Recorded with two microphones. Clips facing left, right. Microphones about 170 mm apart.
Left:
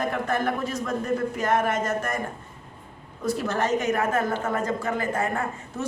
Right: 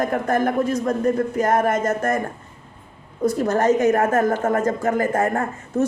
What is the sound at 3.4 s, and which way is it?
A woman's voice, 45° right (ahead or behind).